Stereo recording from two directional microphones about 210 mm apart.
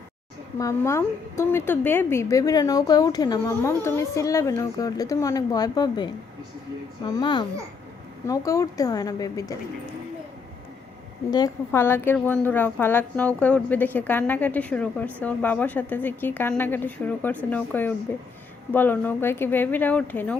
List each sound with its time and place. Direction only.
0.6 s a woman's voice: 15° left (ahead or behind)
7.1 s a child's voice: 20° left (ahead or behind)
11.3 s a woman's voice: 15° left (ahead or behind)